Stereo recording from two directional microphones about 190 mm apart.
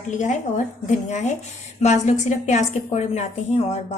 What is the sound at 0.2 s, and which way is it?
A woman's voice, 40° left (ahead or behind).